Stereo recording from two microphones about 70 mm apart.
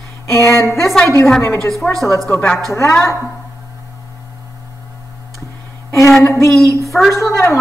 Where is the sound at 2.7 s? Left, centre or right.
Left.